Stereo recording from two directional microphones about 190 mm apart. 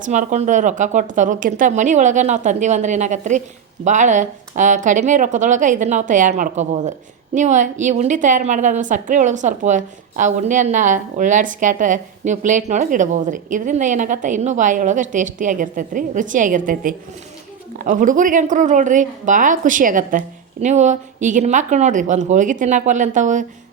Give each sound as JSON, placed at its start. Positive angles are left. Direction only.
{"t": 0.0, "sound": "a woman's voice", "side_deg": -40}